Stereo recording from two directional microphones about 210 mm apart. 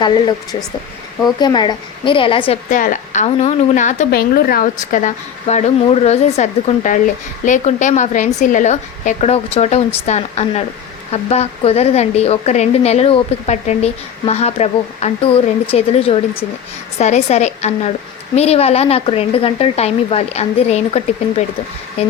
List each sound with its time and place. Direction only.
1.4 s speech: 20° left (ahead or behind)
2.6 s a woman's voice: 40° left (ahead or behind)